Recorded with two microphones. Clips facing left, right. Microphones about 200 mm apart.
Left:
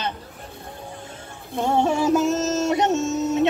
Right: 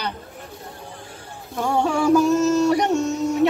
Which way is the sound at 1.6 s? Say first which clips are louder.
Even; 20° left (ahead or behind).